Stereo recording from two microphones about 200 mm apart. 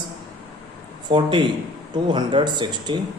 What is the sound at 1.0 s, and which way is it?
A man's voice, 25° right (ahead or behind).